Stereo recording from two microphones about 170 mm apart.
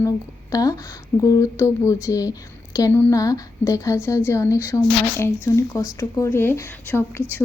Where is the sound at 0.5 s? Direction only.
20° left (ahead or behind).